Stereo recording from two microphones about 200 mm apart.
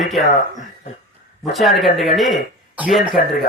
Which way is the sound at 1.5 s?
Centre (ahead or behind).